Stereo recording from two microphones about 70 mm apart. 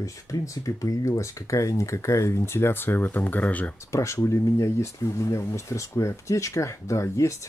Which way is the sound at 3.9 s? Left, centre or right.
Left.